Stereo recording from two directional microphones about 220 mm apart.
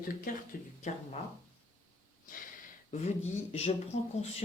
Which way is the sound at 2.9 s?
30° left (ahead or behind).